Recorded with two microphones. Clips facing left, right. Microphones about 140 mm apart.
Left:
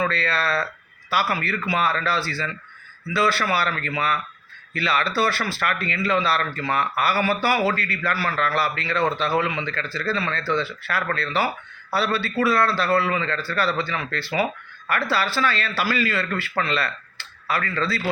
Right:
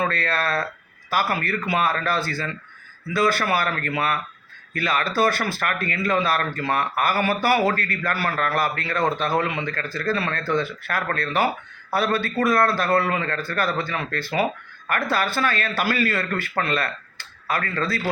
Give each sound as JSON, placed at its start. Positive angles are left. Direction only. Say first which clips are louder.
{"t": 0.0, "sound": "speech", "louder": "even", "side_deg": -50}